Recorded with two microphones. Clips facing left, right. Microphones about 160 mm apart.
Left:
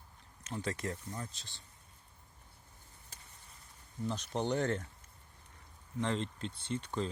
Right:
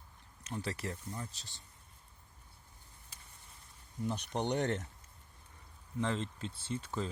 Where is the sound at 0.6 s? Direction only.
30° right (ahead or behind).